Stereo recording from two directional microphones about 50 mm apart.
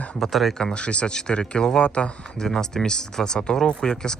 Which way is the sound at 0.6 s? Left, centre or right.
Centre.